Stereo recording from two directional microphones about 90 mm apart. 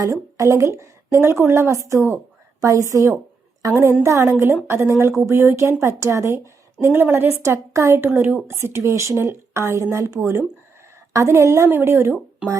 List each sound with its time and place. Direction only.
0.0 s a woman's voice: 35° right (ahead or behind)
4.0 s a woman's voice: 30° right (ahead or behind)